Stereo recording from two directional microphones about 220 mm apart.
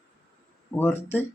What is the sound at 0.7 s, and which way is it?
Speech, 10° left (ahead or behind).